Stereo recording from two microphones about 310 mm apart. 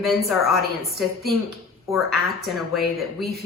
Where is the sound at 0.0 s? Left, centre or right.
Centre.